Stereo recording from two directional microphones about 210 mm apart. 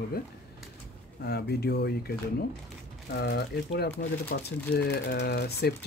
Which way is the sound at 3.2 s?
50° left (ahead or behind).